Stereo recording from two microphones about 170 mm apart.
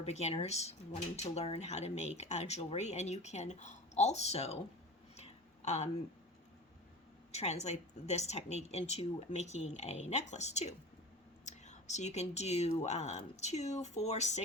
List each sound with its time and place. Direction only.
0.0 s speech: 40° left (ahead or behind)
5.1 s a sound: 40° left (ahead or behind)
7.3 s speech: 40° left (ahead or behind)